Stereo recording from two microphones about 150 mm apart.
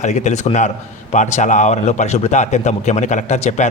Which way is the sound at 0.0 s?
50° left (ahead or behind).